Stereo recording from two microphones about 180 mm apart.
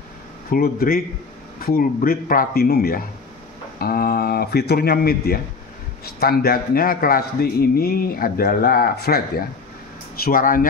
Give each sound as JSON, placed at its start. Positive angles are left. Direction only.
{"t": 0.5, "sound": "a man's voice", "side_deg": 55}
{"t": 10.2, "sound": "speech", "side_deg": 50}